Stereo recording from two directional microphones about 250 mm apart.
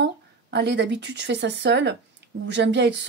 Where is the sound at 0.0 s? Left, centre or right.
Right.